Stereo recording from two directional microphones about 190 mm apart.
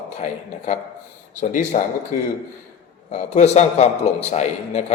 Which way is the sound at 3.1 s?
35° left (ahead or behind).